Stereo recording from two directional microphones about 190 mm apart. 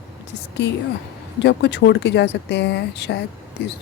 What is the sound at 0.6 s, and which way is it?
A woman's voice, 65° left (ahead or behind).